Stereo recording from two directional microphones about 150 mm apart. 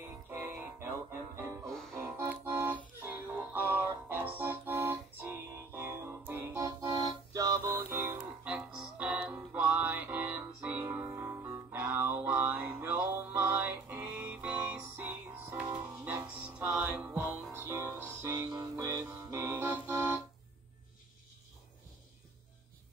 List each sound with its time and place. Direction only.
0.3 s music: 15° right (ahead or behind)
1.7 s music: 5° left (ahead or behind)
2.0 s music: 15° right (ahead or behind)